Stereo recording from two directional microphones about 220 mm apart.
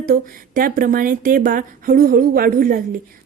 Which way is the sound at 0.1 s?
40° right (ahead or behind).